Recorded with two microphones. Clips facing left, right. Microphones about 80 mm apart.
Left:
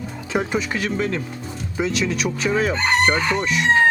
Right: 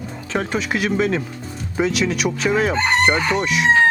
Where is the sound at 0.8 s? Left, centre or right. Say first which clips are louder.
Right 4 dB; right.